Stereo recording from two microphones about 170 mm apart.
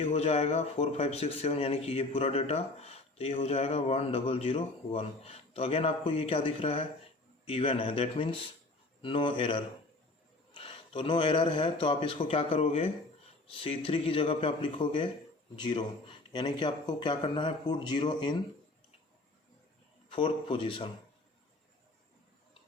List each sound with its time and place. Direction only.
0.0 s speech: 40° left (ahead or behind)
20.1 s speech: 30° left (ahead or behind)